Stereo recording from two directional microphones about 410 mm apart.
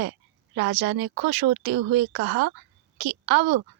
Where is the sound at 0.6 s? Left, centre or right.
Right.